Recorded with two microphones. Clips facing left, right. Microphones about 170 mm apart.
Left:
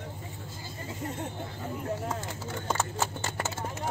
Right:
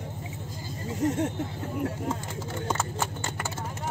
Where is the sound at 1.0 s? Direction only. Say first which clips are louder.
Right 11 dB; 90° right.